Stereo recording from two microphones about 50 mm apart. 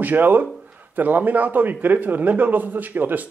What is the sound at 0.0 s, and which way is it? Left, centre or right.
Speech, right.